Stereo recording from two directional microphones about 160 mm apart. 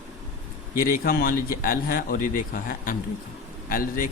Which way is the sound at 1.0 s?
65° left (ahead or behind).